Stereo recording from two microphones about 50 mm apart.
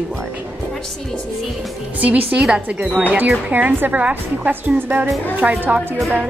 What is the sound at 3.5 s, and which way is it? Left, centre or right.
A woman's voice, right.